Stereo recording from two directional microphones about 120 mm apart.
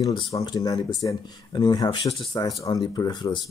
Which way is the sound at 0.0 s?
40° left (ahead or behind).